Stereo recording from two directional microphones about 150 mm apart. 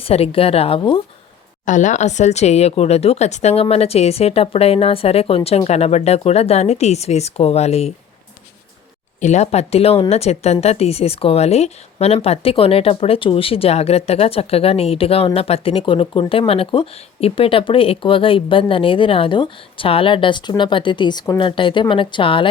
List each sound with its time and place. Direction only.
0.0 s a woman's voice: 40° left (ahead or behind)
1.6 s speech: 55° left (ahead or behind)
9.2 s a woman's voice: 50° left (ahead or behind)